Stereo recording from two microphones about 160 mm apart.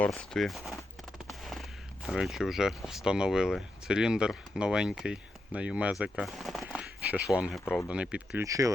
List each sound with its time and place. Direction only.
0.0 s speech: 5° left (ahead or behind)
1.3 s a sound: centre (ahead or behind)
2.0 s speech: centre (ahead or behind)
8.4 s speech: 20° right (ahead or behind)